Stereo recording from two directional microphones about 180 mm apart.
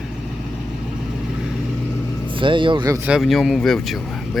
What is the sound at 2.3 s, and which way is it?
Speech, 30° right (ahead or behind).